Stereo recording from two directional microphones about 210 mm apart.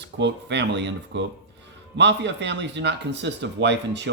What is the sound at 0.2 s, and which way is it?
Speech, 55° right (ahead or behind).